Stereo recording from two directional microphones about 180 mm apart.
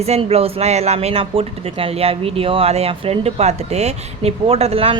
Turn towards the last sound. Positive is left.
turn(degrees=-35)  # may be behind; listen again after turning